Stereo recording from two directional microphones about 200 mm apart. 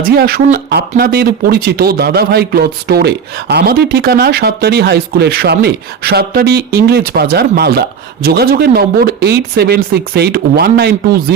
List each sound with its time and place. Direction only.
0.0 s speech: 50° right (ahead or behind)